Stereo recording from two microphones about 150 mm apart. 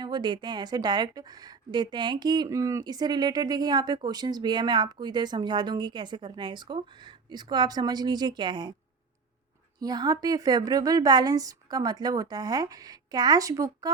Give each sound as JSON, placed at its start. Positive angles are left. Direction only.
{"t": 0.0, "sound": "a woman's voice", "side_deg": -30}
{"t": 9.8, "sound": "a woman's voice", "side_deg": -25}